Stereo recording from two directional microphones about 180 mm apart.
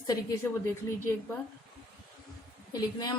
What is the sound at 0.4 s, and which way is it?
Speech, 10° left (ahead or behind).